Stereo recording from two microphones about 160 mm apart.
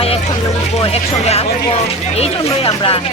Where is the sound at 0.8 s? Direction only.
40° left (ahead or behind).